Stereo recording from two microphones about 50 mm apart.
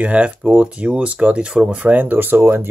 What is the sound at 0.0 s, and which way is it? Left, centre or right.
Speech, right.